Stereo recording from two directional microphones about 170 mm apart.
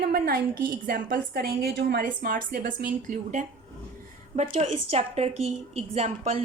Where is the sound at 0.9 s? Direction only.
55° right (ahead or behind).